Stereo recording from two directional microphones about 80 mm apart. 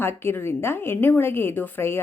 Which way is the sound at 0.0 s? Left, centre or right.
Left.